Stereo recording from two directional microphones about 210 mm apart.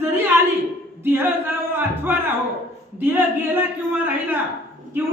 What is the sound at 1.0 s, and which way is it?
A man's voice, 10° right (ahead or behind).